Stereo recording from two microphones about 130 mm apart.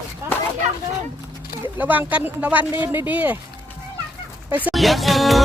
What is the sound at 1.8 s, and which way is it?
Speech, 15° right (ahead or behind).